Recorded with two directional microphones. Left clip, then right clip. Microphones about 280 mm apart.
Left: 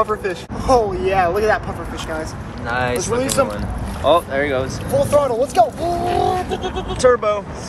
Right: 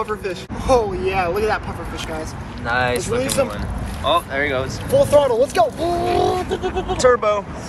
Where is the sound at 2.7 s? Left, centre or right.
Centre.